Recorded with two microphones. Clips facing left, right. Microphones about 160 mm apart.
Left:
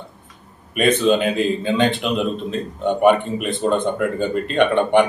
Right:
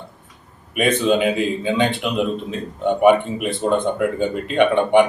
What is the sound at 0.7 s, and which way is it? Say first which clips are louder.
A man's voice: left 1 dB; 10° right (ahead or behind).